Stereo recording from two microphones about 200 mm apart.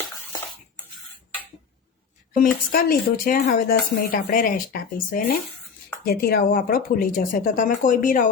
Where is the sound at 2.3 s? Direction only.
45° left (ahead or behind).